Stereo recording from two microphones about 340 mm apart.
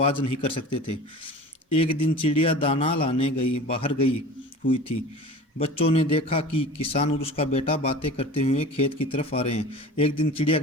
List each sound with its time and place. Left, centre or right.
0.0 s a man's voice: centre
1.7 s a man's voice: centre